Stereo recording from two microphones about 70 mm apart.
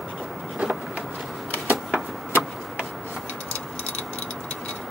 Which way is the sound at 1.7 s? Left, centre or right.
Right.